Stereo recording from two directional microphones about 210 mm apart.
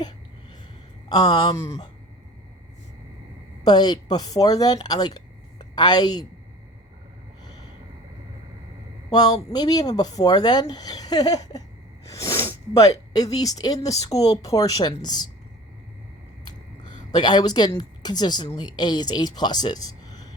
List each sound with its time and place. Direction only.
1.1 s a woman's voice: 20° left (ahead or behind)
3.6 s speech: 20° left (ahead or behind)
9.0 s a woman's voice: 20° left (ahead or behind)
17.2 s a woman's voice: 20° left (ahead or behind)